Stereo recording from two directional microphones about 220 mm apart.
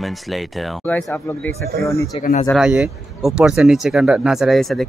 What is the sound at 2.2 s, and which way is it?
Speech, 40° left (ahead or behind).